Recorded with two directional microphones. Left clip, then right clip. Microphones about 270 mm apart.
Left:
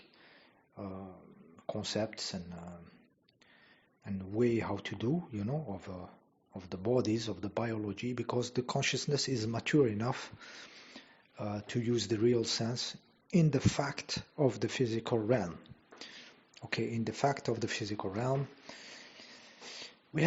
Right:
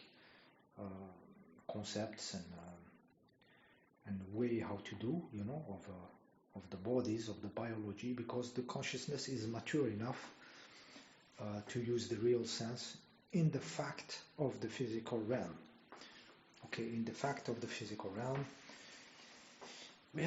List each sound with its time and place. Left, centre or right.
1.6 s speech: left
4.0 s speech: left
11.0 s a sound: left
11.3 s speech: left
16.6 s speech: left